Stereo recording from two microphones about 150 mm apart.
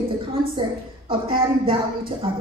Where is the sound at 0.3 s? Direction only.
35° right (ahead or behind).